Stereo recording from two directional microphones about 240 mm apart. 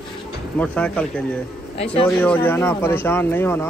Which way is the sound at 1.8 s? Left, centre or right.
Left.